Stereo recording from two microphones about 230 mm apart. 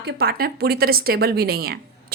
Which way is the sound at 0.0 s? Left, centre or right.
Right.